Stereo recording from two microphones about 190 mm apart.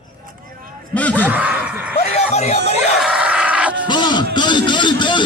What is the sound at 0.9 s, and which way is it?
Speech, 5° left (ahead or behind).